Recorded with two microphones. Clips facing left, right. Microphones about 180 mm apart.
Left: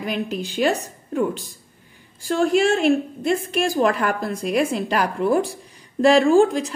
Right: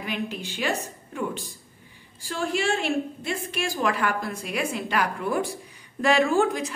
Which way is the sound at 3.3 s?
40° left (ahead or behind).